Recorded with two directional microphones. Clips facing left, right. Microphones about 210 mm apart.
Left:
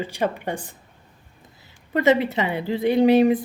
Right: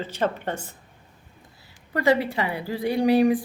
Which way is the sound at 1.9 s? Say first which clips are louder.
Left 3 dB; 20° left (ahead or behind).